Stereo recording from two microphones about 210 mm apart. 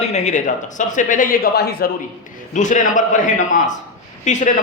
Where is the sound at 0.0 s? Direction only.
30° left (ahead or behind).